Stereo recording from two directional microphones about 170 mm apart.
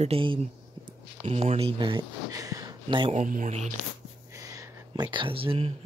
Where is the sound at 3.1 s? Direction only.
50° right (ahead or behind).